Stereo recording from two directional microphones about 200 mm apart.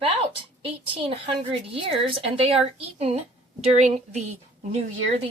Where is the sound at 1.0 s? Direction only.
25° right (ahead or behind).